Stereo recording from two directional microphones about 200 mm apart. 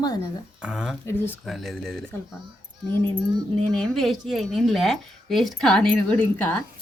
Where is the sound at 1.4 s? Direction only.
Centre (ahead or behind).